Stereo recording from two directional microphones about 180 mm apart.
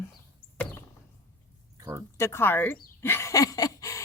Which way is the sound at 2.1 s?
15° left (ahead or behind).